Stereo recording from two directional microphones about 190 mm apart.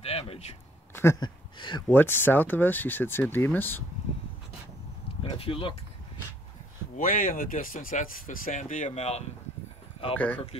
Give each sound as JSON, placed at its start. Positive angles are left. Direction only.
{"t": 0.0, "sound": "speech", "side_deg": 30}
{"t": 0.9, "sound": "speech", "side_deg": 15}
{"t": 1.6, "sound": "speech", "side_deg": 25}
{"t": 1.9, "sound": "speech", "side_deg": 10}
{"t": 5.2, "sound": "speech", "side_deg": 30}
{"t": 7.0, "sound": "speech", "side_deg": 45}
{"t": 10.1, "sound": "speech", "side_deg": 5}